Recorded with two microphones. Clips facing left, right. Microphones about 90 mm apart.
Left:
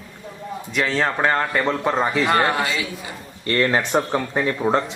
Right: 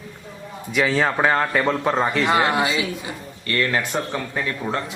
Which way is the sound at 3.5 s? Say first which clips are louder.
Left 3 dB; 30° left (ahead or behind).